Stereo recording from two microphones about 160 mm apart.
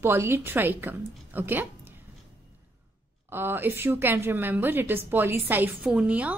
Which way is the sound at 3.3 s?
15° right (ahead or behind).